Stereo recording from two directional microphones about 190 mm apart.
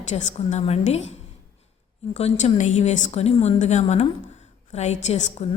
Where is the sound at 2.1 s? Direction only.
35° left (ahead or behind).